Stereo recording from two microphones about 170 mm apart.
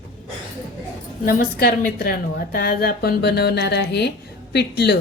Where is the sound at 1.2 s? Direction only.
55° left (ahead or behind).